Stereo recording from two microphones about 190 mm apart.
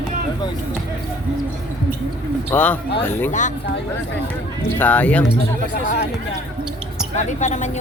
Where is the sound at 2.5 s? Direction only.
10° left (ahead or behind).